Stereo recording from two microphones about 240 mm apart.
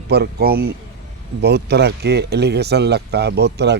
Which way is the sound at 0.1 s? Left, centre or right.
Right.